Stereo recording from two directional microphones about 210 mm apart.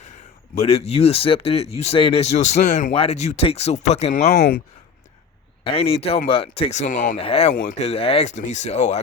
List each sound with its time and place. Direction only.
0.5 s speech: 30° left (ahead or behind)
5.6 s speech: 25° left (ahead or behind)